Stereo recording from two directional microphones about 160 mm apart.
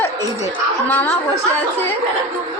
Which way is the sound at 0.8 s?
10° left (ahead or behind).